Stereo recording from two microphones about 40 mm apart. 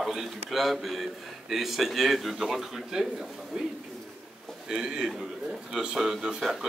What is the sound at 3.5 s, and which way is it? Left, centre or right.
Speech, centre.